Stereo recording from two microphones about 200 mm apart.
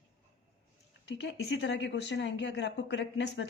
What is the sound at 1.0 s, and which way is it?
A woman's voice, 60° left (ahead or behind).